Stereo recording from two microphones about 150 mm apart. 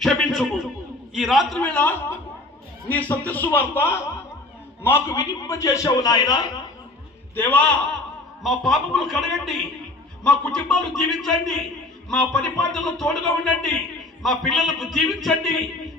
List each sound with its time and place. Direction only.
0.0 s a sound: centre (ahead or behind)
1.1 s a man's voice: centre (ahead or behind); by 6.4 s 25° left (ahead or behind)
7.3 s a man's voice: 10° left (ahead or behind)